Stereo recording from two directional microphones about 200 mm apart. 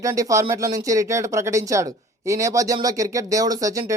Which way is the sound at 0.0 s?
15° right (ahead or behind).